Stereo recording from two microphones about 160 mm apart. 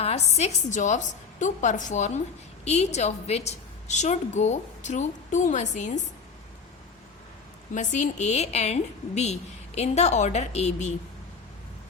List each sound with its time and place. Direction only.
0.0 s a woman's voice: 40° left (ahead or behind)
7.7 s a woman's voice: 50° left (ahead or behind)